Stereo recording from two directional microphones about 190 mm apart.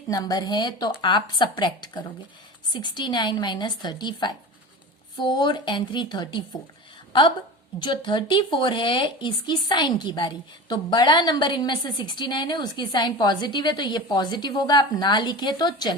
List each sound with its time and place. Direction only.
0.1 s a woman's voice: 20° left (ahead or behind)